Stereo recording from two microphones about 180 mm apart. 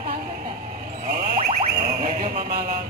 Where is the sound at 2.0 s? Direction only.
45° right (ahead or behind).